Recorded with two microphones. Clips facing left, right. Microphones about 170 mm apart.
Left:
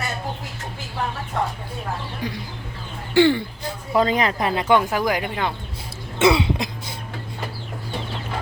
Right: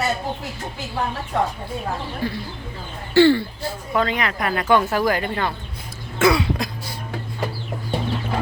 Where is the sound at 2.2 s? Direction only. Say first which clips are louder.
Right 3 dB; 15° left (ahead or behind).